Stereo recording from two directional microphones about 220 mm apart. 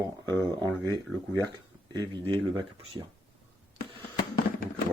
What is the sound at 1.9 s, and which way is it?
Speech, 20° right (ahead or behind).